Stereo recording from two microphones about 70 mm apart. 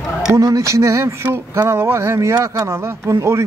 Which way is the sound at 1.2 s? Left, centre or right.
Right.